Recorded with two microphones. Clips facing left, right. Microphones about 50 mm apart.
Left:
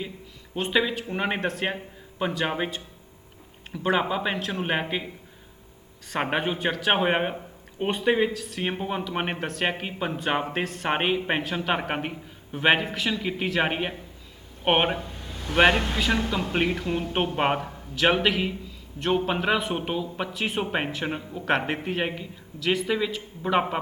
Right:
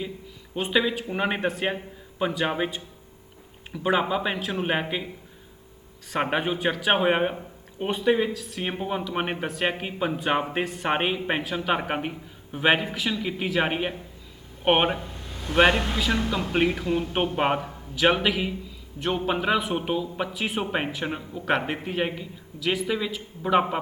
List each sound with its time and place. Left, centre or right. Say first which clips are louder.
0.5 s a man's voice: even; centre
3.8 s a man's voice: right 1 dB; centre
6.1 s a man's voice: right 1 dB; centre
8.0 s speech: even; centre
8.3 s a man's voice: left 1 dB; centre
10.9 s a man's voice: left 1 dB; centre